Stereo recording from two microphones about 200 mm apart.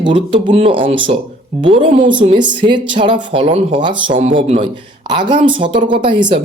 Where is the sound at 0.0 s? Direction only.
25° right (ahead or behind).